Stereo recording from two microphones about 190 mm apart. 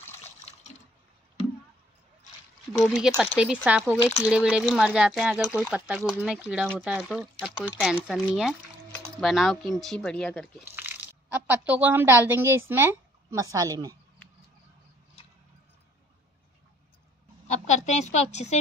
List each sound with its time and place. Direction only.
2.8 s speech: centre (ahead or behind)
10.6 s speech: 10° right (ahead or behind)
17.5 s a woman's voice: 40° left (ahead or behind)